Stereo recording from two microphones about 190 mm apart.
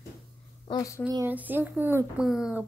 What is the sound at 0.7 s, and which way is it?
Speech, 20° left (ahead or behind).